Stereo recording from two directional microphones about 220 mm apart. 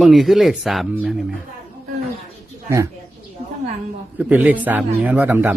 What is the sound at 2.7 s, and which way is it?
Speech, 15° right (ahead or behind).